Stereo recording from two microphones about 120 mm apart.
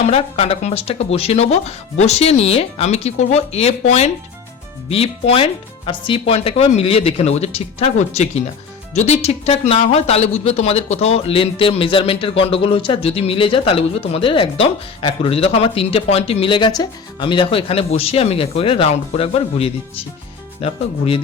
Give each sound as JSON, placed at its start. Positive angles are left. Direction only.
{"t": 0.0, "sound": "speech", "side_deg": 60}